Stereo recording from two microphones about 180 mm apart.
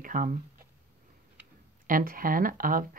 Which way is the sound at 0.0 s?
50° right (ahead or behind).